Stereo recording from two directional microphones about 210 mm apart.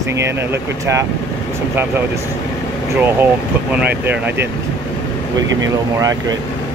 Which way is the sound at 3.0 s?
10° right (ahead or behind).